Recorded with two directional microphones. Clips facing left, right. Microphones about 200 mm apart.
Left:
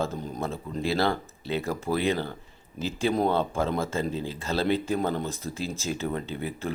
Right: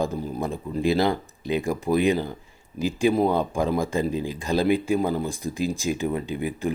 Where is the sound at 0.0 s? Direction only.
10° right (ahead or behind).